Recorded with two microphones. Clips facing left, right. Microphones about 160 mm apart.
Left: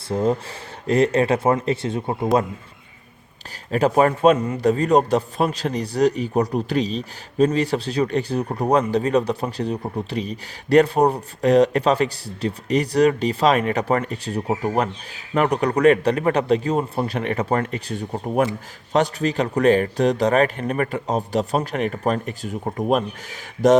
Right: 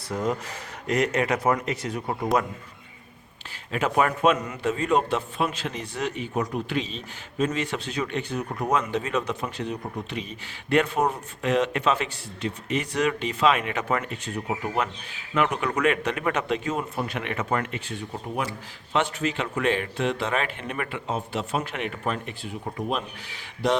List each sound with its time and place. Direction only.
0.1 s speech: 30° left (ahead or behind)
3.7 s a man's voice: 35° left (ahead or behind)